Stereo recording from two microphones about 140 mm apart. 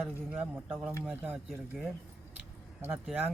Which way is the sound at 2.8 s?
15° right (ahead or behind).